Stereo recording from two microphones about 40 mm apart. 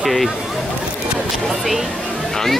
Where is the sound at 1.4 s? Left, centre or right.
Centre.